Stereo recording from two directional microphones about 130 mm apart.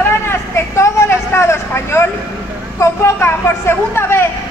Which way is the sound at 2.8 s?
20° left (ahead or behind).